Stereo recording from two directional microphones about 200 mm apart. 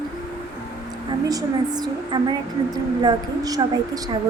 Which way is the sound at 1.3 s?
20° right (ahead or behind).